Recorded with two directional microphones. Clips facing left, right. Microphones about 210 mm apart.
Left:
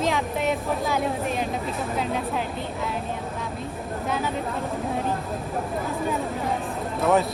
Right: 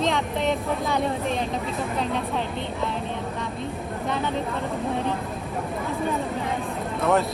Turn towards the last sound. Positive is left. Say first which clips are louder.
# left 1 dB
turn(degrees=0)  # may be behind; listen again after turning